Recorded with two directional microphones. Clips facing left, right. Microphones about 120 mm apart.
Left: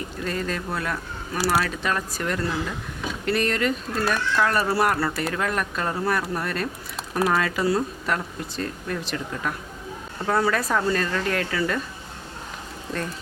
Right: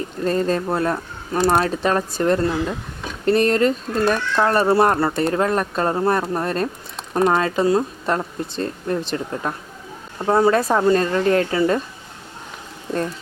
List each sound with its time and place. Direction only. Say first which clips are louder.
0.3 s speech: right 9 dB; 35° right (ahead or behind)